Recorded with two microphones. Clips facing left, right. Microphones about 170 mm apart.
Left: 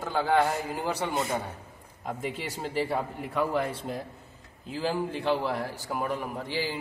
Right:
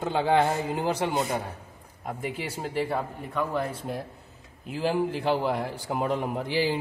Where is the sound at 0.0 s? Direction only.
25° right (ahead or behind).